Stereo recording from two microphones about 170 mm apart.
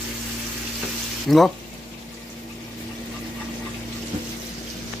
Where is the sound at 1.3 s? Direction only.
Centre (ahead or behind).